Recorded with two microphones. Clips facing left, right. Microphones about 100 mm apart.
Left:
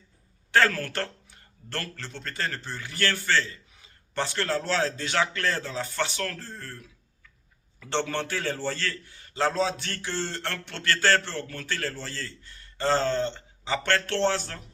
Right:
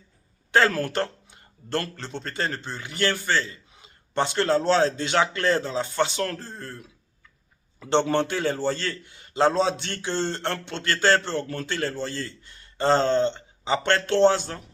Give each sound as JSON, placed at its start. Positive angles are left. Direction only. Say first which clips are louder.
{"t": 0.5, "sound": "a man's voice", "louder": "right 3 dB", "side_deg": -20}